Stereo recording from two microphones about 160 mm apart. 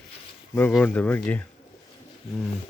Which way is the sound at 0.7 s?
10° left (ahead or behind).